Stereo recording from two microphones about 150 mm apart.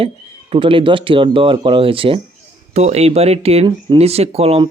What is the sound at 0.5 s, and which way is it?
Speech, 35° right (ahead or behind).